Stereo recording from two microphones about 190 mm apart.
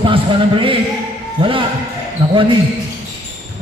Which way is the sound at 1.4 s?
25° right (ahead or behind).